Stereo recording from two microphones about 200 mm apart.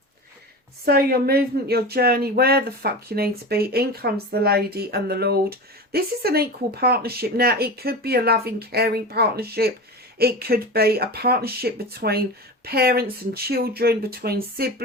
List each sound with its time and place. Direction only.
0.9 s speech: 50° right (ahead or behind)